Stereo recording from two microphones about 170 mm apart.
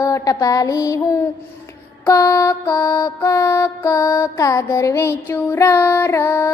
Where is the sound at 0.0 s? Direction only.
20° left (ahead or behind).